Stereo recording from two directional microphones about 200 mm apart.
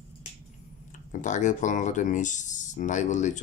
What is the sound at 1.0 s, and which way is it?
Speech, 40° left (ahead or behind).